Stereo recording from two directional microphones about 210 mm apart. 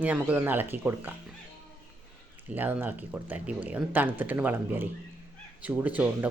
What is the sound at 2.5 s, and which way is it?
Speech, 5° right (ahead or behind).